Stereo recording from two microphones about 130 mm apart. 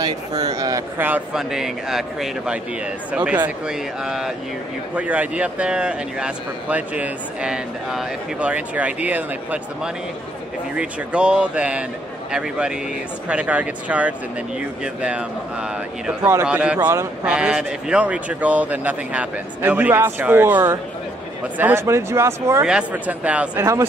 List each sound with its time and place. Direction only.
0.6 s speech: 30° right (ahead or behind)
0.9 s a man's voice: 15° right (ahead or behind)
10.8 s a man's voice: 5° right (ahead or behind)
22.7 s a man's voice: 10° right (ahead or behind)
23.6 s speech: 20° right (ahead or behind)